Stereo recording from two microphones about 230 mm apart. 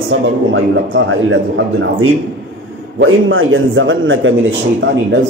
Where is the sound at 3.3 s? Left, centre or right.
Right.